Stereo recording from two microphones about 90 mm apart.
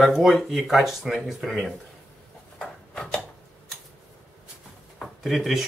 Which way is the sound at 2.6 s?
10° left (ahead or behind).